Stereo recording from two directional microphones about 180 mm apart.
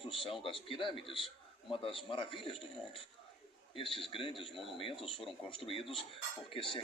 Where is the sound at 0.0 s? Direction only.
30° left (ahead or behind).